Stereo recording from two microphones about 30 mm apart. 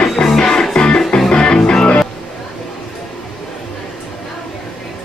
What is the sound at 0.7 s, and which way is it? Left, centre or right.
Music, left.